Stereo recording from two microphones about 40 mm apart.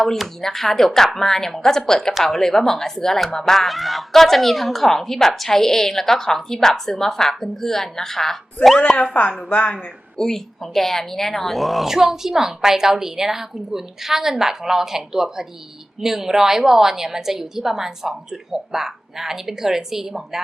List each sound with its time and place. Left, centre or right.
0.4 s a woman's voice: centre
3.7 s a woman's voice: centre
9.2 s speech: left
10.2 s a woman's voice: centre